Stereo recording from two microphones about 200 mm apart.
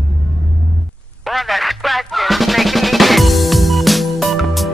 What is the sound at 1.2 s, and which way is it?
Music, centre (ahead or behind).